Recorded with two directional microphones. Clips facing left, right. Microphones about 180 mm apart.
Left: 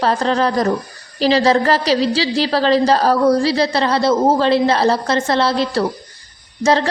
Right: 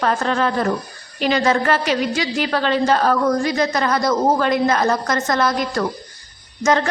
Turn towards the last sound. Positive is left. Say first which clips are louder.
# left 2 dB
turn(degrees=30)  # may be behind; listen again after turning